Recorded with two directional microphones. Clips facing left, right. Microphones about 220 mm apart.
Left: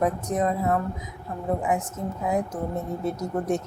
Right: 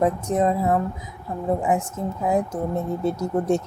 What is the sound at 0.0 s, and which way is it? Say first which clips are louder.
Speech: right 4 dB; 25° right (ahead or behind).